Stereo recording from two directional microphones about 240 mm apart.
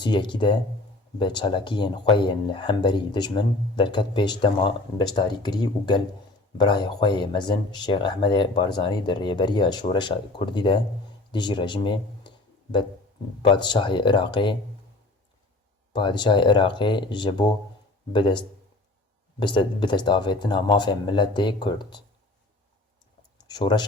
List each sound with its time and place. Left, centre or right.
0.0 s speech: centre
13.4 s speech: centre
15.9 s speech: centre
23.4 s a sound: centre